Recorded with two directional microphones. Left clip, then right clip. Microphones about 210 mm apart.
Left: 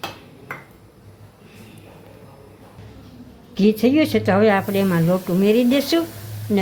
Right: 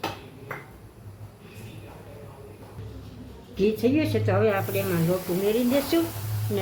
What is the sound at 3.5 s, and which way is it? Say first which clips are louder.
A woman's voice: left 6 dB; 50° left (ahead or behind).